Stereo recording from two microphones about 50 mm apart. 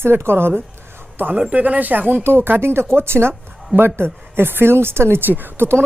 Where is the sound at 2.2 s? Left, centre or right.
Right.